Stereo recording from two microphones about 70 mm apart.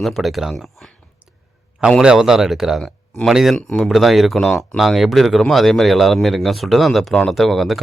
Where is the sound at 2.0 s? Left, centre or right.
Centre.